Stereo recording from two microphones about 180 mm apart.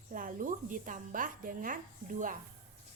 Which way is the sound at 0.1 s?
50° right (ahead or behind).